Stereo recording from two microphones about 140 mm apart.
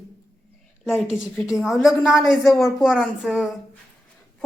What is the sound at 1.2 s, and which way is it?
Speech, 5° right (ahead or behind).